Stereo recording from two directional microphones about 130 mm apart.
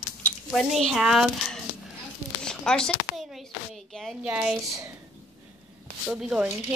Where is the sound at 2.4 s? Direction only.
5° left (ahead or behind).